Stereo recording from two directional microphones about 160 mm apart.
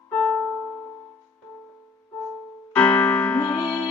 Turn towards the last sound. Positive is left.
turn(degrees=10)  # may be behind; listen again after turning